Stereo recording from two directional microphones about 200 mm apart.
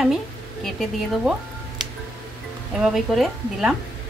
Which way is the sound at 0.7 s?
Centre (ahead or behind).